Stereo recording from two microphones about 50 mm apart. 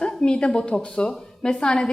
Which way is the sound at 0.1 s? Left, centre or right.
Centre.